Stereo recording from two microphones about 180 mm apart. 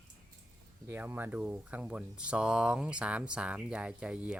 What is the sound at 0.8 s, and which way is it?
Speech, 10° right (ahead or behind).